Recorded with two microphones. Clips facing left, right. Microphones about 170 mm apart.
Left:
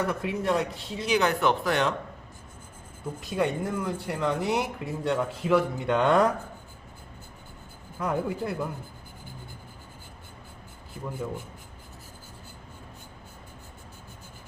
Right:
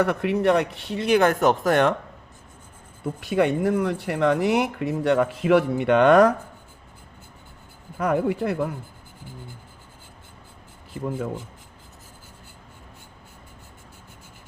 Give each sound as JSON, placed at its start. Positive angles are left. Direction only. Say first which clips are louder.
{"t": 0.0, "sound": "speech", "louder": "right 7 dB", "side_deg": -70}
{"t": 3.2, "sound": "speech", "louder": "right 6 dB", "side_deg": -70}
{"t": 7.9, "sound": "speech", "louder": "right 6 dB", "side_deg": -75}
{"t": 11.0, "sound": "speech", "louder": "right 7 dB", "side_deg": -80}